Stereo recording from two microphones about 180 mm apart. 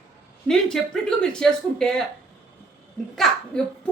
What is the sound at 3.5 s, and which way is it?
Speech, 5° left (ahead or behind).